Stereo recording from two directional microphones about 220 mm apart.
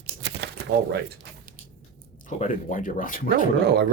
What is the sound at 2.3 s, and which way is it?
Speech, 35° left (ahead or behind).